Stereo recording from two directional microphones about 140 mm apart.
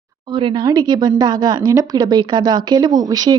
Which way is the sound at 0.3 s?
35° right (ahead or behind).